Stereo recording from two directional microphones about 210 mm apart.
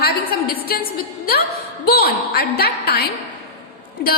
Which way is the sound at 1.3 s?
45° left (ahead or behind).